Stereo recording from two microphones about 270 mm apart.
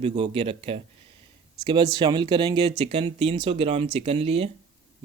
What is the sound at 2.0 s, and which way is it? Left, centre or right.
Speech, centre.